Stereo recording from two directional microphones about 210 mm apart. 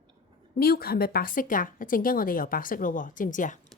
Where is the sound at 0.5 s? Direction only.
45° left (ahead or behind).